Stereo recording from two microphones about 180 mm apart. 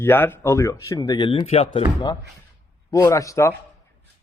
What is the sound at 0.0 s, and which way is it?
Speech, 10° left (ahead or behind).